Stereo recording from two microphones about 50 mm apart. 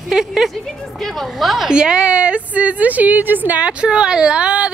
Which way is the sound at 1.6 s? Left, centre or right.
Centre.